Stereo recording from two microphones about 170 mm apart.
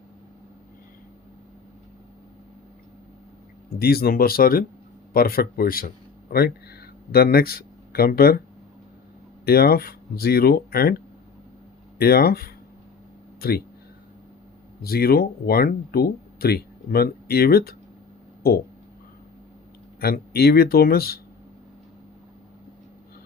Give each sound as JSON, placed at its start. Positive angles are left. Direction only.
{"t": 3.7, "sound": "speech", "side_deg": 65}
{"t": 9.5, "sound": "speech", "side_deg": 65}
{"t": 14.8, "sound": "speech", "side_deg": 65}
{"t": 20.0, "sound": "speech", "side_deg": 65}